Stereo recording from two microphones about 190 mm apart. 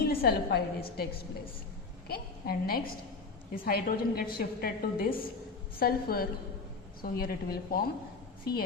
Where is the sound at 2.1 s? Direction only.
55° left (ahead or behind).